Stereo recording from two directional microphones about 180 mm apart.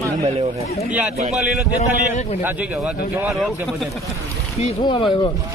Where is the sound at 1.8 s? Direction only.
40° left (ahead or behind).